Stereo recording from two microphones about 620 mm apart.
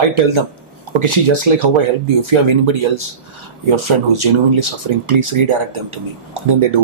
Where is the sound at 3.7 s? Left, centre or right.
Right.